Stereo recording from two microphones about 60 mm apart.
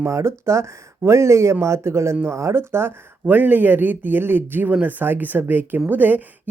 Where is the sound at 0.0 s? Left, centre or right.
Right.